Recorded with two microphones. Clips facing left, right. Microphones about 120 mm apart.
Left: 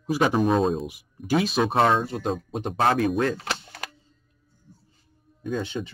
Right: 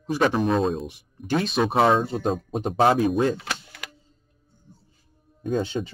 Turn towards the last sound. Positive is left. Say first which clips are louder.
# right 3 dB
turn(degrees=-40)  # may be behind; listen again after turning